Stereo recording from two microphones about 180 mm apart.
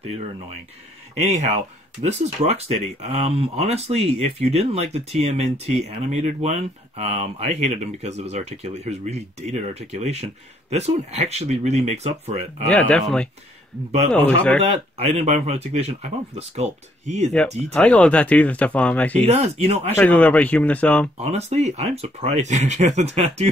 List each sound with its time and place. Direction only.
1.1 s speech: 40° right (ahead or behind)
12.6 s speech: 5° left (ahead or behind)
14.6 s speech: 35° right (ahead or behind)
17.4 s speech: 5° left (ahead or behind)
19.2 s speech: 35° right (ahead or behind)
20.0 s speech: 10° left (ahead or behind)
21.2 s speech: 35° right (ahead or behind)